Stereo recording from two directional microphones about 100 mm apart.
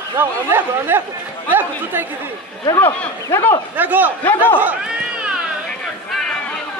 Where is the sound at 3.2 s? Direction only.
30° left (ahead or behind).